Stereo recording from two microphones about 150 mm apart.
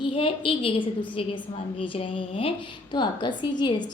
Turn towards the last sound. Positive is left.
turn(degrees=30)  # may be behind; listen again after turning